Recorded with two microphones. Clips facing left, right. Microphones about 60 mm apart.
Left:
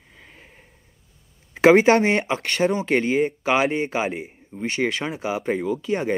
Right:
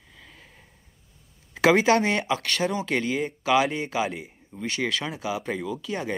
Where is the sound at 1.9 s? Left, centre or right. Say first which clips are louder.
Left 4 dB; left.